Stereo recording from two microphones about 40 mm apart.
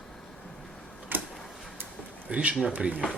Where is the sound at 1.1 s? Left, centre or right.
Right.